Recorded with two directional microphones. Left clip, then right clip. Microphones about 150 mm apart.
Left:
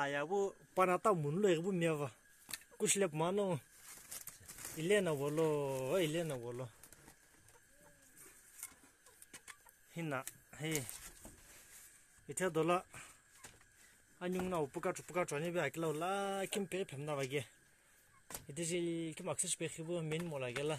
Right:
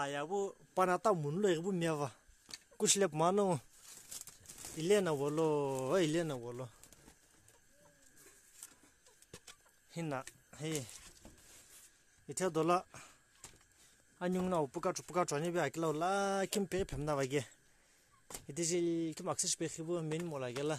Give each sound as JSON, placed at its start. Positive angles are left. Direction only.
{"t": 0.0, "sound": "speech", "side_deg": -20}
{"t": 4.7, "sound": "speech", "side_deg": -30}
{"t": 6.4, "sound": "speech", "side_deg": -15}
{"t": 9.8, "sound": "chicken", "side_deg": -30}
{"t": 10.5, "sound": "speech", "side_deg": -20}
{"t": 12.4, "sound": "speech", "side_deg": -30}
{"t": 14.1, "sound": "speech", "side_deg": -45}
{"t": 17.2, "sound": "speech", "side_deg": -35}
{"t": 18.5, "sound": "speech", "side_deg": -35}